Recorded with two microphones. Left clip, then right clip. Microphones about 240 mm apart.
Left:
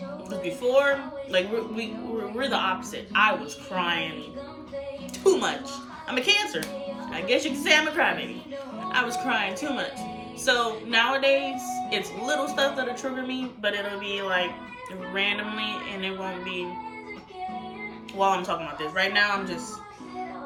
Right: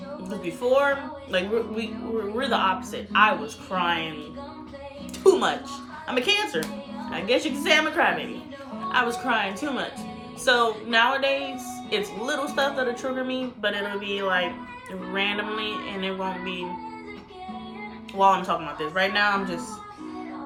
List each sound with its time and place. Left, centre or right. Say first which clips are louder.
0.3 s speech: right 2 dB; centre
5.2 s speech: right 3 dB; centre
18.2 s speech: right 4 dB; centre